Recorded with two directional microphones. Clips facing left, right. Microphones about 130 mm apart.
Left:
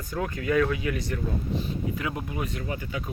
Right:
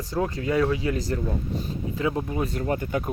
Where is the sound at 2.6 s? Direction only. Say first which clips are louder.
Right 7 dB; 50° right (ahead or behind).